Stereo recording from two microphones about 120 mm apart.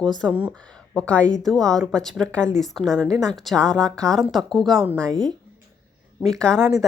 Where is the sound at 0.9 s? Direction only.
10° left (ahead or behind).